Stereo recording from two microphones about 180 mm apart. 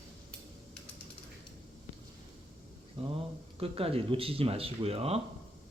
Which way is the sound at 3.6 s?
30° right (ahead or behind).